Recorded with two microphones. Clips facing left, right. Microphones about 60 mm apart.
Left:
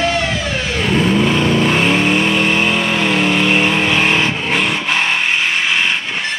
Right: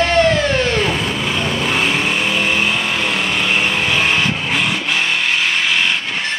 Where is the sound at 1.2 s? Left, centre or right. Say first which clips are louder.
Left 6 dB; centre.